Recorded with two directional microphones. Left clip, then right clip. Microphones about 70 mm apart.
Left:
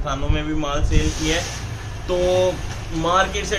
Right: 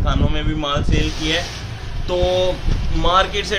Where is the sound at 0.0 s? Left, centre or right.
Right.